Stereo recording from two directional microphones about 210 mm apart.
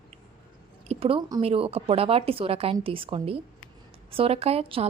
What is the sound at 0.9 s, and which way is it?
A woman's voice, 25° right (ahead or behind).